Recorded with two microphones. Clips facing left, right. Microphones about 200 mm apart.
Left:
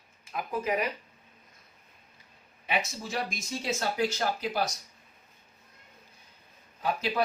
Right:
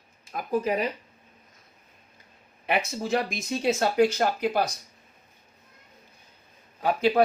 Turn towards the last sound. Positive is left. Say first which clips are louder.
# right 7 dB
turn(degrees=-55)  # may be behind; listen again after turning